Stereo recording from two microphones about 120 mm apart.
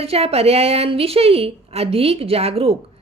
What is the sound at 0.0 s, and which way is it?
A woman's voice, 55° right (ahead or behind).